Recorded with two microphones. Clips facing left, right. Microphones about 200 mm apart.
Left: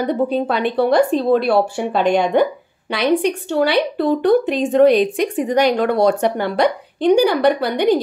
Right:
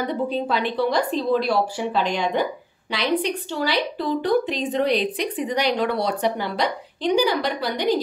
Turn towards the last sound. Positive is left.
turn(degrees=60)  # may be behind; listen again after turning